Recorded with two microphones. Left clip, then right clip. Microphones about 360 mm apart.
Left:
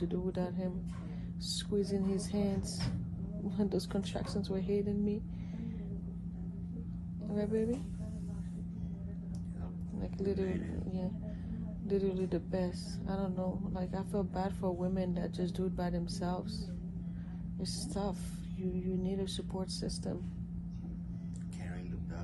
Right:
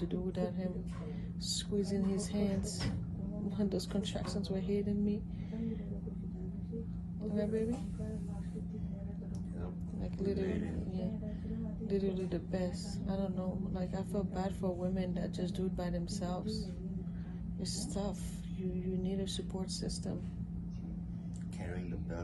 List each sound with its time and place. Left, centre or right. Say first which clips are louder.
0.1 s speech: left 1 dB; centre
7.2 s speech: left 1 dB; centre
11.9 s speech: left 3 dB; centre
17.6 s speech: left 1 dB; centre